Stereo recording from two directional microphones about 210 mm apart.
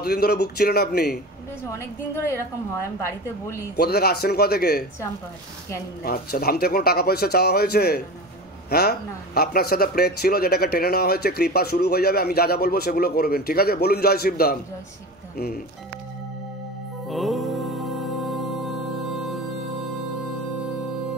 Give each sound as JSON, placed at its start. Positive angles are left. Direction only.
{"t": 0.0, "sound": "a man's voice", "side_deg": 50}
{"t": 1.7, "sound": "a woman's voice", "side_deg": 15}
{"t": 3.7, "sound": "a man's voice", "side_deg": 50}
{"t": 6.0, "sound": "a man's voice", "side_deg": 45}
{"t": 17.1, "sound": "music", "side_deg": 0}